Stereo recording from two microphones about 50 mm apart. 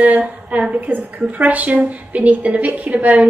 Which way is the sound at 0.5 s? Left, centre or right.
Right.